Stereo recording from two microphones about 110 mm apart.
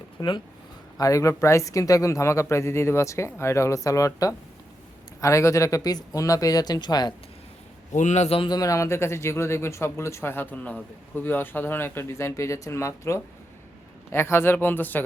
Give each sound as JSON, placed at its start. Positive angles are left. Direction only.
{"t": 0.2, "sound": "speech", "side_deg": 45}
{"t": 0.9, "sound": "speech", "side_deg": 30}
{"t": 8.0, "sound": "a man's voice", "side_deg": 90}
{"t": 8.4, "sound": "speech", "side_deg": 35}